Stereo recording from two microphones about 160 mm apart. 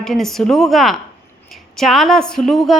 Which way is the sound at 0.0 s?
Centre (ahead or behind).